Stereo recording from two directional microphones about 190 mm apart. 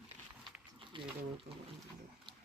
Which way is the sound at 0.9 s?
25° right (ahead or behind).